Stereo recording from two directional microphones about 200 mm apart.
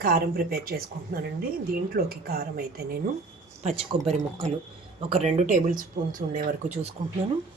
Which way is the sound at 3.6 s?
35° right (ahead or behind).